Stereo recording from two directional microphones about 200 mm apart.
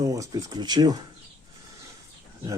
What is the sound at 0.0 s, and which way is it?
Speech, 15° right (ahead or behind).